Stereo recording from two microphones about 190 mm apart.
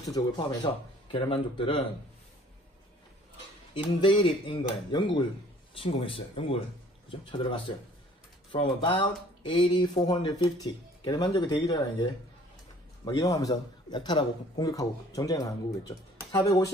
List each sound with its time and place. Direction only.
0.0 s a man's voice: 20° left (ahead or behind)
3.7 s a man's voice: 25° left (ahead or behind)